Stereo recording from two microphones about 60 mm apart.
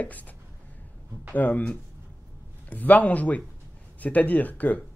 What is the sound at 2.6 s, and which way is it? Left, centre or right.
Speech, left.